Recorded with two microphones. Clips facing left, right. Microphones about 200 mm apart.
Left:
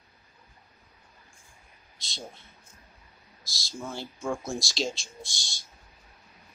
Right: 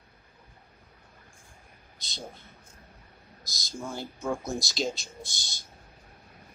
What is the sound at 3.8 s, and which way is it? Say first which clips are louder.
Speech: even; 5° right (ahead or behind).